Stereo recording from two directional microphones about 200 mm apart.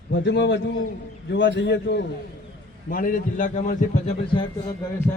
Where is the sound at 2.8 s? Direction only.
45° left (ahead or behind).